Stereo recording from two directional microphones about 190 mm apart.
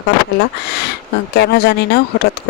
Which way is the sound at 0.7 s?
60° left (ahead or behind).